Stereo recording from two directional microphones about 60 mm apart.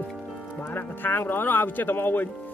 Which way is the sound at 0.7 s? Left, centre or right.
Left.